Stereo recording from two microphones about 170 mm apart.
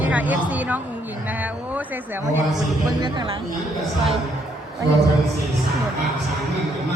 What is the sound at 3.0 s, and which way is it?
Speech, 25° right (ahead or behind).